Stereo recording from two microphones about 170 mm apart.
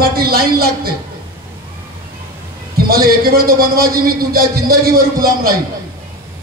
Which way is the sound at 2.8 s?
60° right (ahead or behind).